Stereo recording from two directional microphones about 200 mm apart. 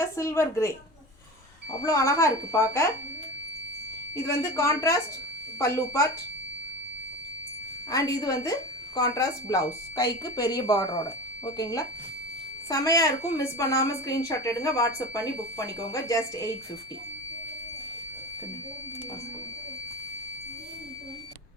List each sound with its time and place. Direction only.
0.2 s speech: 15° left (ahead or behind)
1.8 s speech: 15° left (ahead or behind)
4.1 s speech: 15° left (ahead or behind)
7.9 s a woman's voice: 20° left (ahead or behind)